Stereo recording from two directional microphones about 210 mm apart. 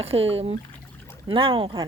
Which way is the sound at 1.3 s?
25° right (ahead or behind).